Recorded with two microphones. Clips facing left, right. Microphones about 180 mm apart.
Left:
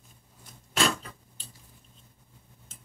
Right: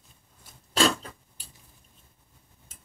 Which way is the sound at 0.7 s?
30° right (ahead or behind).